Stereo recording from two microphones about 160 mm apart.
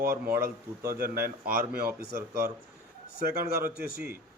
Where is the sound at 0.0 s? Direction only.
70° right (ahead or behind).